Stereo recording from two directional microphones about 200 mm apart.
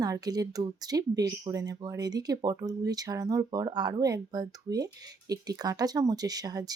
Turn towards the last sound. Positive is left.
turn(degrees=-20)  # may be behind; listen again after turning